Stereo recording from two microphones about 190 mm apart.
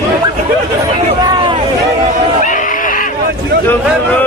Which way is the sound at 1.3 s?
25° right (ahead or behind).